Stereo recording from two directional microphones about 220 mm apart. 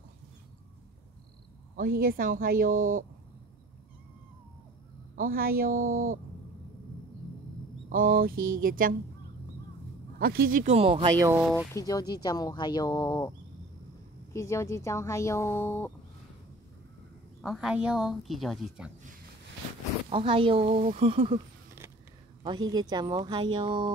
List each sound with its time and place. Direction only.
1.8 s speech: 40° right (ahead or behind)
5.1 s speech: 40° right (ahead or behind)
7.9 s speech: 40° right (ahead or behind)
10.1 s speech: 45° right (ahead or behind); by 11.6 s 10° right (ahead or behind)
11.7 s speech: 15° left (ahead or behind)
14.3 s speech: 15° left (ahead or behind)
17.4 s speech: centre (ahead or behind)
20.1 s speech: 25° right (ahead or behind)
22.4 s speech: 20° right (ahead or behind)